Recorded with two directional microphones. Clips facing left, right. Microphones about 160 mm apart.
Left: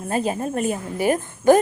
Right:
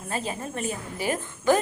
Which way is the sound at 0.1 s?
45° left (ahead or behind).